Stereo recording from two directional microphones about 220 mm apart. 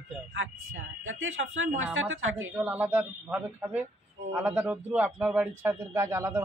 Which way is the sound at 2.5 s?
5° right (ahead or behind).